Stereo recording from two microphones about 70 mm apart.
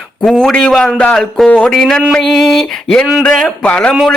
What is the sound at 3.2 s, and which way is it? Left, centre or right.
Speech, centre.